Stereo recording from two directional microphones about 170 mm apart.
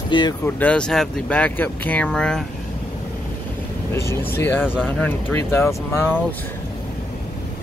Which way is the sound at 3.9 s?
15° left (ahead or behind).